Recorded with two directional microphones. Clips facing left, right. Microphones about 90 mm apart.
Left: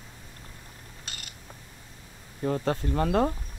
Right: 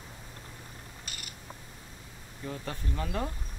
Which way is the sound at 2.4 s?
50° left (ahead or behind).